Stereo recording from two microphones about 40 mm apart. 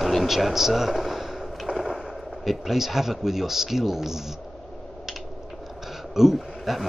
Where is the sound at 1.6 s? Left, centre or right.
Centre.